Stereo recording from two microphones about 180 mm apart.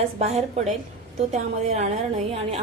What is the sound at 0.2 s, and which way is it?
A woman's voice, 35° right (ahead or behind).